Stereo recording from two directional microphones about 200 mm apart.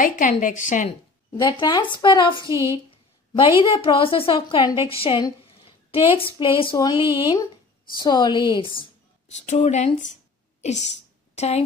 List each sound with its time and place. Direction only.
0.0 s a woman's voice: 40° left (ahead or behind)
1.3 s a woman's voice: 25° left (ahead or behind)
2.4 s a sound: 25° left (ahead or behind)
3.6 s a woman's voice: 25° left (ahead or behind)
9.3 s a woman's voice: 35° left (ahead or behind)
10.6 s a sound: 35° left (ahead or behind)